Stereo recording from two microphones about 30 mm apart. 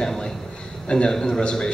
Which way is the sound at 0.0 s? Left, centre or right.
Centre.